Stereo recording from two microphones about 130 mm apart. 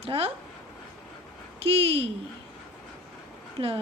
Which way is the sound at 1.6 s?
50° right (ahead or behind).